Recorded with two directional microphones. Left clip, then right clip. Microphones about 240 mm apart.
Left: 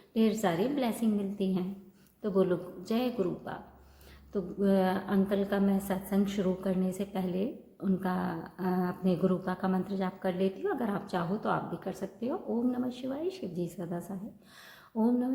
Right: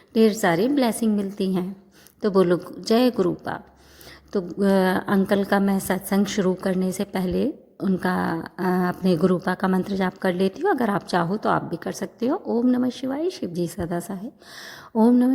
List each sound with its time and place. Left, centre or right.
0.1 s a woman's voice: right